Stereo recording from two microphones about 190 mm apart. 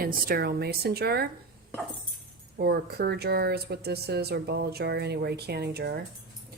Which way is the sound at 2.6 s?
55° right (ahead or behind).